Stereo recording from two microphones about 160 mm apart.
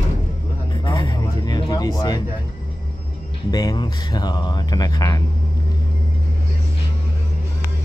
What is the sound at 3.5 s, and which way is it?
Speech, 25° left (ahead or behind).